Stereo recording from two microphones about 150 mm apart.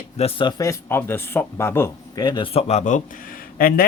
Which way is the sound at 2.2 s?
30° left (ahead or behind).